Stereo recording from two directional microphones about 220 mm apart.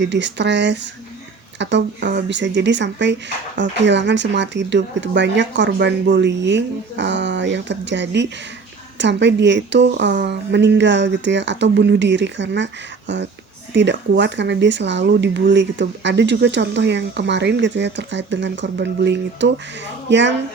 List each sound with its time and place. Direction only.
0.0 s speech: 55° right (ahead or behind)
13.7 s speech: 55° right (ahead or behind)